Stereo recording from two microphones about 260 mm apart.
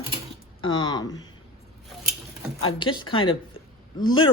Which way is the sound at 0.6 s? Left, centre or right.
Centre.